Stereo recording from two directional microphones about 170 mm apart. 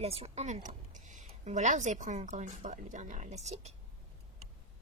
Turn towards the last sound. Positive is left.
turn(degrees=-40)  # may be behind; listen again after turning